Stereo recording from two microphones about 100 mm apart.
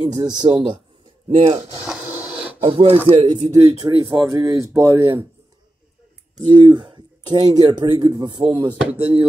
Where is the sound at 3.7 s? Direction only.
45° right (ahead or behind).